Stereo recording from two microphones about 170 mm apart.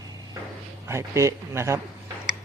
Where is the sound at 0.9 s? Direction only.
15° right (ahead or behind).